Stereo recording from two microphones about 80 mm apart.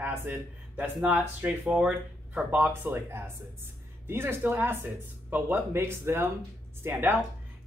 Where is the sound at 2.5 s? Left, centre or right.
Right.